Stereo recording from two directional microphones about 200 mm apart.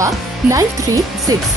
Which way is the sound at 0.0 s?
15° right (ahead or behind).